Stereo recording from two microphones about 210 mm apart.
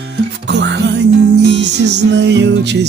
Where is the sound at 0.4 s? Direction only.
55° right (ahead or behind).